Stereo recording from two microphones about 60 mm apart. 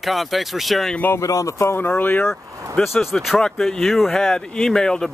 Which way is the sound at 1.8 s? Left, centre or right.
Left.